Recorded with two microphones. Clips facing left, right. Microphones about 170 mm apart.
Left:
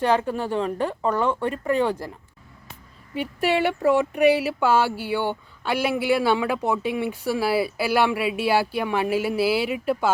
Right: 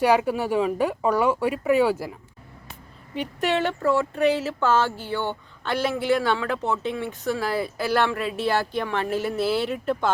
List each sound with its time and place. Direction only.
0.0 s speech: 10° right (ahead or behind)
3.2 s speech: 10° left (ahead or behind)